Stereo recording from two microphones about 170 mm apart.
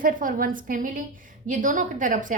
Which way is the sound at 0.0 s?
55° right (ahead or behind).